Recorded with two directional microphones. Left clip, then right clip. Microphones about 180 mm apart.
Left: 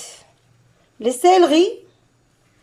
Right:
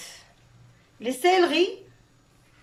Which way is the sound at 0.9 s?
40° left (ahead or behind).